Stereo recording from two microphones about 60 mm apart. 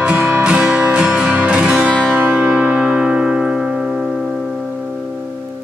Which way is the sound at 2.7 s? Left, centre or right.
Centre.